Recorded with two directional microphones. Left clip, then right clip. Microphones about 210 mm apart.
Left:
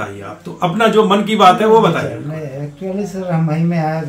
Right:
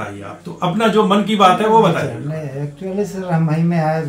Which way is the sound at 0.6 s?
20° left (ahead or behind).